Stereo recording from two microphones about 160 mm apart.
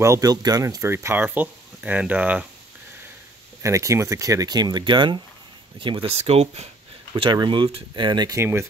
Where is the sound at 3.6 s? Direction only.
20° right (ahead or behind); by 6.7 s 40° right (ahead or behind).